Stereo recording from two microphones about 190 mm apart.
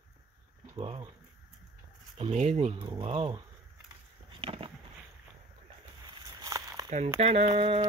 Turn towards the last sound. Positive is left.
turn(degrees=-30)  # may be behind; listen again after turning